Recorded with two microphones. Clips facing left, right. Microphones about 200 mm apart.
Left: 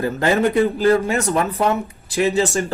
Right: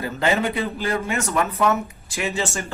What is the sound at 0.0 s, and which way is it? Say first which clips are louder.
Speech: left 4 dB; 45° left (ahead or behind).